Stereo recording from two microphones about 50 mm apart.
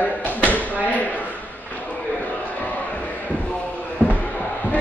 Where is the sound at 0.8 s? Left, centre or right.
Left.